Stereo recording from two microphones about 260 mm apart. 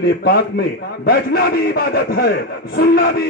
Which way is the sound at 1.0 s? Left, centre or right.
Left.